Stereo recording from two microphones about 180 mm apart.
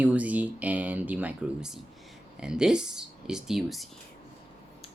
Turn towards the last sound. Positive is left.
turn(degrees=30)  # may be behind; listen again after turning